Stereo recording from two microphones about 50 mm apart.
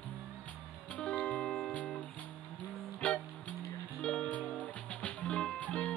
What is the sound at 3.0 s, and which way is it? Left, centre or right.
Music, left.